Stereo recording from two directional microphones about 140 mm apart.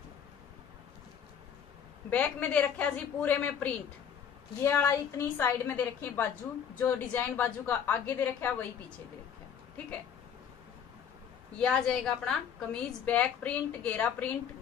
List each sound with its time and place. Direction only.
2.0 s a woman's voice: 10° left (ahead or behind)
11.5 s a woman's voice: 5° left (ahead or behind)